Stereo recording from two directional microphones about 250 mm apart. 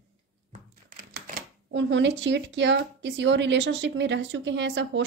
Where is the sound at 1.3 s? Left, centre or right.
Right.